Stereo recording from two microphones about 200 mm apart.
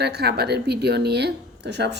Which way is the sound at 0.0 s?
55° right (ahead or behind).